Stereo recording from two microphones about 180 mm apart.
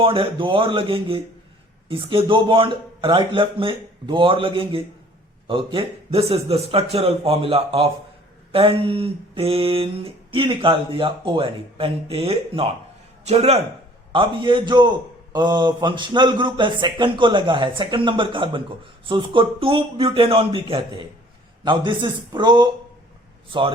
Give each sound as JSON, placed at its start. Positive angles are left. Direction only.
{"t": 0.0, "sound": "a man's voice", "side_deg": -30}
{"t": 5.5, "sound": "a sound", "side_deg": -30}
{"t": 14.1, "sound": "a man's voice", "side_deg": -30}